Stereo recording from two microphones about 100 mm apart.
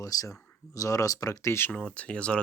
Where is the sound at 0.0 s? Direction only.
35° left (ahead or behind).